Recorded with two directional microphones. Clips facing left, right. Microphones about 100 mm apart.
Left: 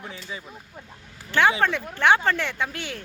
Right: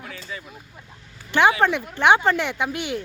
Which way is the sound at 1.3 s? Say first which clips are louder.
Right 3 dB; 20° right (ahead or behind).